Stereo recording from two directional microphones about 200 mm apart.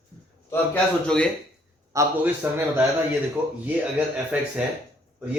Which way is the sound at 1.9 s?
10° right (ahead or behind).